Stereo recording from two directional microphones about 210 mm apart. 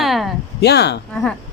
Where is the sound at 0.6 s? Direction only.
50° left (ahead or behind).